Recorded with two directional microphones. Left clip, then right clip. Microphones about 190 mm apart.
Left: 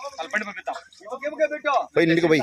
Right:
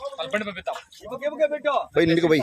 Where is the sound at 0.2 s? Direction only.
60° right (ahead or behind).